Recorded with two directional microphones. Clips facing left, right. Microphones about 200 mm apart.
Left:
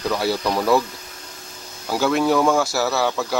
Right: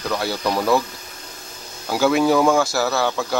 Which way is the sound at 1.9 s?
5° right (ahead or behind).